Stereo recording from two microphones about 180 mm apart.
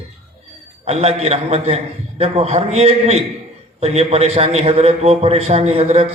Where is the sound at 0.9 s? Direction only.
35° right (ahead or behind).